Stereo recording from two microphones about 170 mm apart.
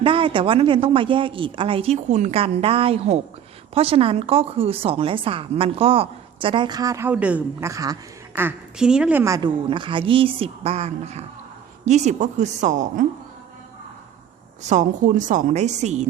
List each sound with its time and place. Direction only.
0.0 s a woman's voice: 30° right (ahead or behind)
7.1 s a woman's voice: 10° right (ahead or behind)
7.7 s a man's voice: 20° right (ahead or behind)
8.4 s a woman's voice: 10° right (ahead or behind)
9.6 s a woman's voice: 30° right (ahead or behind); by 13.1 s 45° right (ahead or behind)
14.7 s a woman's voice: 45° right (ahead or behind)